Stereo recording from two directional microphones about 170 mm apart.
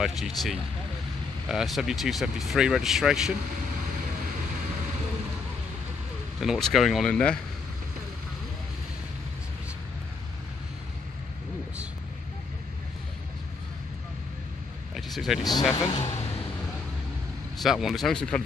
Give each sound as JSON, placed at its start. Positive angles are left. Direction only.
{"t": 0.0, "sound": "speech", "side_deg": 0}
{"t": 6.4, "sound": "speech", "side_deg": 0}
{"t": 15.0, "sound": "vehicle", "side_deg": 0}
{"t": 15.7, "sound": "speech", "side_deg": 20}
{"t": 17.6, "sound": "speech", "side_deg": 0}